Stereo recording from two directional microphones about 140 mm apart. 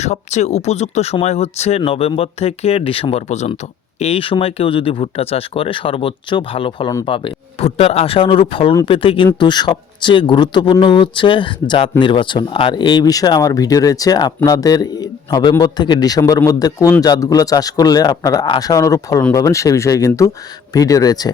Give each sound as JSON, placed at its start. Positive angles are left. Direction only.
{"t": 0.0, "sound": "speech", "side_deg": 55}
{"t": 4.0, "sound": "a man's voice", "side_deg": 40}